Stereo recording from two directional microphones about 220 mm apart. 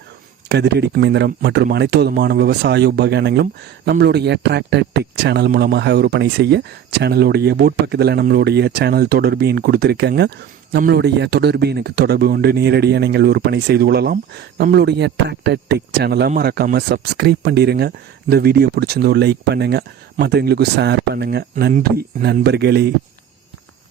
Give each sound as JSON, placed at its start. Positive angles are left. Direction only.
{"t": 0.4, "sound": "speech", "side_deg": -50}
{"t": 21.5, "sound": "speech", "side_deg": -35}